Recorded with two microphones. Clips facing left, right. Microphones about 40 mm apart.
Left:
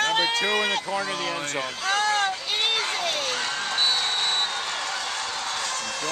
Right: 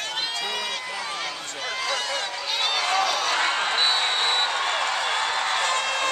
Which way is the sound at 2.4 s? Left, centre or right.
Left.